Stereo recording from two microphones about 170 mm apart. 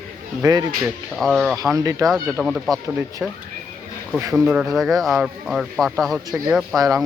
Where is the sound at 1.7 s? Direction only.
20° right (ahead or behind).